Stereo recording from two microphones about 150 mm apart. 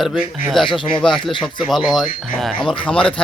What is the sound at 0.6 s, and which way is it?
Speech, 30° left (ahead or behind).